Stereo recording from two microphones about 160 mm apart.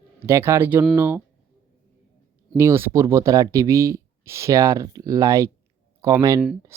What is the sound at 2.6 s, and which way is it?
Speech, 15° right (ahead or behind).